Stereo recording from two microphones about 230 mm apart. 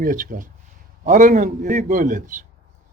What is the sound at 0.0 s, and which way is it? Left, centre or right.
Speech, right.